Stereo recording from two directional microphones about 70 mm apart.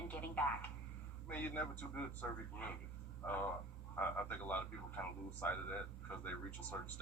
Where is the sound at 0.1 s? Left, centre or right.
Left.